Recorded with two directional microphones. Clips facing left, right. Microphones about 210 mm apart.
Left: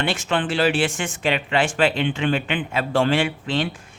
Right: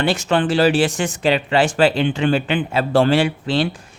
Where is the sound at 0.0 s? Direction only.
40° right (ahead or behind).